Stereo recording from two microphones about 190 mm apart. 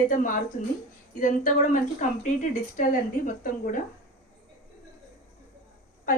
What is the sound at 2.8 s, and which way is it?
A woman's voice, 45° left (ahead or behind).